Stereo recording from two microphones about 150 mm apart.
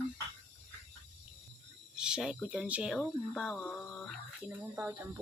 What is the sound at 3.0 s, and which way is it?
Speech, 5° left (ahead or behind).